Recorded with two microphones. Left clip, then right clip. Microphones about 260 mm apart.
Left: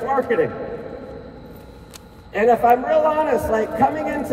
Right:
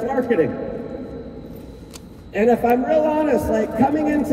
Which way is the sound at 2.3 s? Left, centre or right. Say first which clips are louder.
Left 2 dB; left.